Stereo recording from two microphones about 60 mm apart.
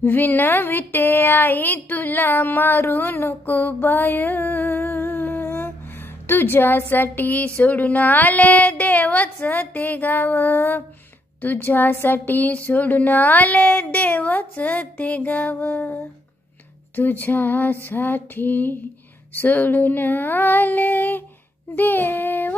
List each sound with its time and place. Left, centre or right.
0.0 s speech: left